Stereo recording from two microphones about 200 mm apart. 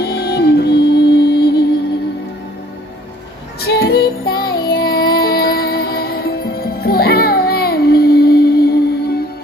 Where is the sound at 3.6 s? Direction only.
50° left (ahead or behind).